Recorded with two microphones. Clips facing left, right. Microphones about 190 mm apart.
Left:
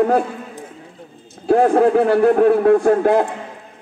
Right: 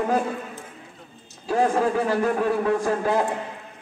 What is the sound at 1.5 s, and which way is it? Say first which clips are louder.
A man's voice: left 8 dB; 60° left (ahead or behind).